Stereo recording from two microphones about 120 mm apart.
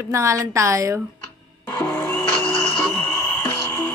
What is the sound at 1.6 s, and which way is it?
Music, 25° left (ahead or behind).